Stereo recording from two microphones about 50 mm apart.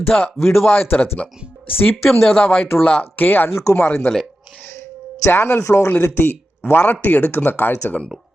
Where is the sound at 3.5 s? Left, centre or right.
Left.